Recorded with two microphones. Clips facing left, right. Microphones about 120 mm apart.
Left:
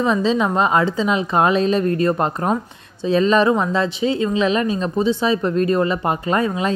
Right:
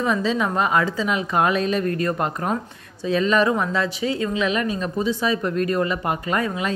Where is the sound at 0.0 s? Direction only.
25° left (ahead or behind).